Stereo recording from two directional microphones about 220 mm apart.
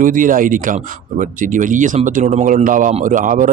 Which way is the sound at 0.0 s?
40° right (ahead or behind).